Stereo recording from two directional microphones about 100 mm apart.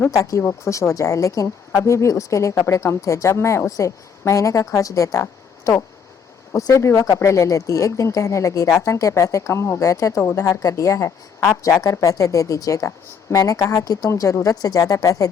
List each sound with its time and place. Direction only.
0.1 s speech: 35° left (ahead or behind)